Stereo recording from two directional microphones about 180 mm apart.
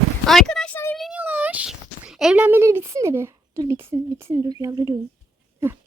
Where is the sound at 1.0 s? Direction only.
5° right (ahead or behind).